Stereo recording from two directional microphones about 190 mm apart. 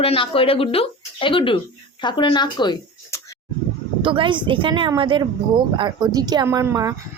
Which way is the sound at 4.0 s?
25° right (ahead or behind).